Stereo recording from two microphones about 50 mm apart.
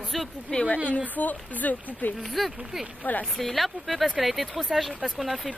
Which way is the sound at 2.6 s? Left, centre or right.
Centre.